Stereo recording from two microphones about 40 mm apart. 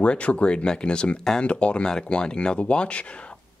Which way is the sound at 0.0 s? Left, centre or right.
Left.